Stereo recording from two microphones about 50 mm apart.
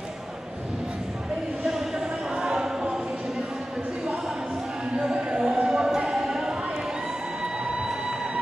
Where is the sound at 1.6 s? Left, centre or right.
Centre.